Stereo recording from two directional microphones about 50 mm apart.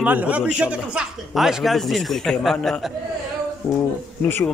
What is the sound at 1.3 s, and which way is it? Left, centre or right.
A man's voice, centre.